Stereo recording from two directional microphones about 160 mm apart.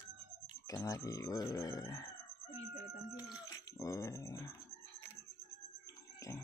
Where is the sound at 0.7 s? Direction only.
20° left (ahead or behind).